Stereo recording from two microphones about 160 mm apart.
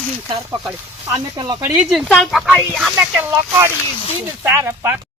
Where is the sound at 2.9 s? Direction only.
15° right (ahead or behind).